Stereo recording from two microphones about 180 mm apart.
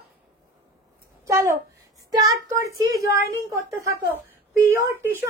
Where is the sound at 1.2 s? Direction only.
15° right (ahead or behind).